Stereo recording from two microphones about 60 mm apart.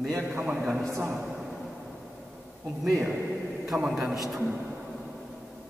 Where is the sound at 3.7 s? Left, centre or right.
Centre.